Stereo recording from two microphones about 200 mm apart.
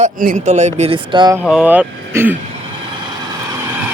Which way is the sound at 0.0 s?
40° right (ahead or behind).